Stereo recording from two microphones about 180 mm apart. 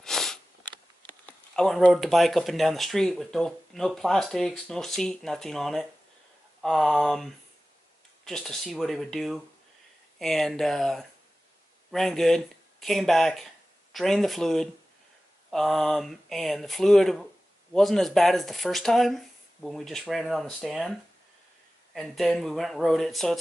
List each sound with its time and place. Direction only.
0.0 s sniff: centre (ahead or behind)
1.2 s speech: 5° left (ahead or behind)
21.9 s speech: centre (ahead or behind)